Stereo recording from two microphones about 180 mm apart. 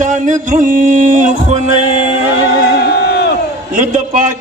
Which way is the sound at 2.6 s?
65° left (ahead or behind).